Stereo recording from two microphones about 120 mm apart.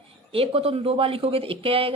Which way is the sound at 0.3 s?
55° right (ahead or behind).